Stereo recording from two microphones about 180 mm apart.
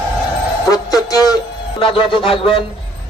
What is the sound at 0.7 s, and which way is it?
A man's voice, 20° left (ahead or behind).